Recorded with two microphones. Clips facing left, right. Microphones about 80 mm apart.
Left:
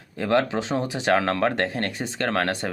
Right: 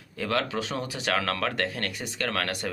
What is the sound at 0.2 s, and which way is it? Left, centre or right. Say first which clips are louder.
Speech: left 6 dB; left.